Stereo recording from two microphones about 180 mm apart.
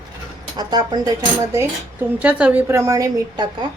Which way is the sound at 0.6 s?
25° right (ahead or behind).